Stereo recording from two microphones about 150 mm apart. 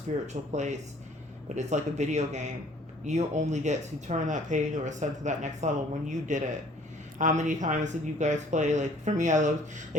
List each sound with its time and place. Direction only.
0.1 s speech: 50° right (ahead or behind)